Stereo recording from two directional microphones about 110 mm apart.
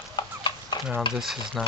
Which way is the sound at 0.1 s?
40° left (ahead or behind).